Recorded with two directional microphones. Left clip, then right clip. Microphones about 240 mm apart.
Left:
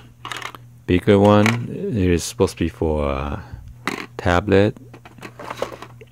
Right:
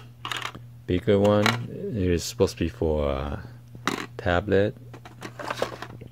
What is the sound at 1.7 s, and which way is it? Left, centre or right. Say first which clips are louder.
Speech: left 6 dB; centre.